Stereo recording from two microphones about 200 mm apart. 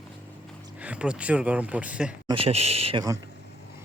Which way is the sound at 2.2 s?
30° right (ahead or behind).